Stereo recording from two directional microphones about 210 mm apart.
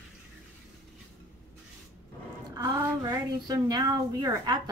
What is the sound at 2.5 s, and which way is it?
A woman's voice, 20° right (ahead or behind).